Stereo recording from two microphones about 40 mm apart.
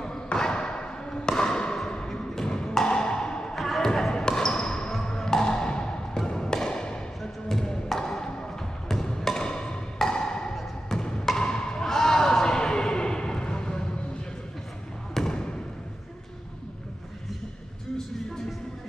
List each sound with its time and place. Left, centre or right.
0.0 s basketball bounce: centre
2.8 s wood block: centre
3.5 s basketball bounce: centre; by 7.0 s left
7.2 s a sound: centre
8.8 s music: centre
10.5 s a sound: centre
11.2 s music: centre
15.1 s basketball bounce: centre